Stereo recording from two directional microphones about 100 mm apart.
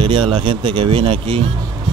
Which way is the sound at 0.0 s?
55° right (ahead or behind).